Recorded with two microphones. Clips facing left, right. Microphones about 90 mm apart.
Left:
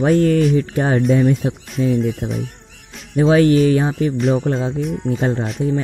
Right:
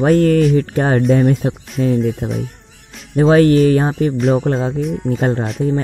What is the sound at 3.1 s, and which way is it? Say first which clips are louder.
Music: right 2 dB; 45° right (ahead or behind).